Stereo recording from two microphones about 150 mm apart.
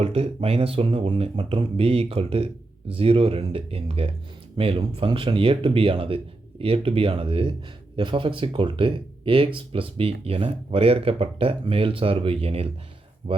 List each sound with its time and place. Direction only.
0.0 s speech: 40° right (ahead or behind)